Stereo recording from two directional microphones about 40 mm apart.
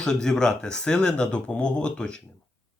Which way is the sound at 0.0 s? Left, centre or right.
Centre.